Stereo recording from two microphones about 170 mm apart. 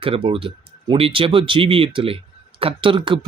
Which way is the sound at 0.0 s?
30° right (ahead or behind).